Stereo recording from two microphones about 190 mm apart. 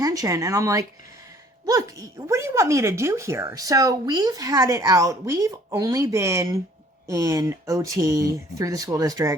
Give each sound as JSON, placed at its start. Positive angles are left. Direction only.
{"t": 0.0, "sound": "speech", "side_deg": -20}